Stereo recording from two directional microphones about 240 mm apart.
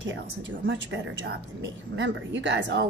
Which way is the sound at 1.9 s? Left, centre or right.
Right.